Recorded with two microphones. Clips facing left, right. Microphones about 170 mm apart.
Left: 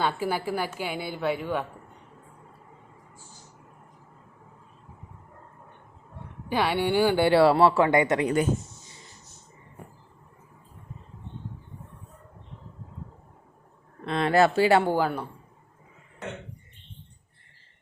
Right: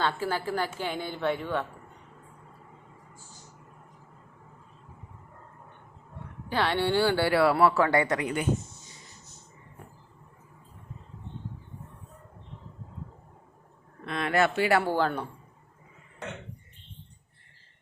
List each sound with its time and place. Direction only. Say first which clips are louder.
0.0 s a woman's voice: left 2 dB; 15° left (ahead or behind)
6.5 s speech: left 2 dB; 10° left (ahead or behind)
14.0 s speech: left 5 dB; 30° left (ahead or behind)
14.9 s a woman's voice: left 1 dB; 5° left (ahead or behind)